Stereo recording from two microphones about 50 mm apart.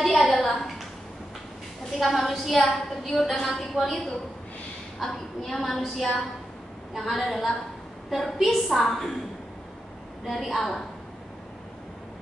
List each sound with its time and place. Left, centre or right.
0.2 s a sound: centre
2.0 s a woman's voice: centre
10.2 s a woman's voice: centre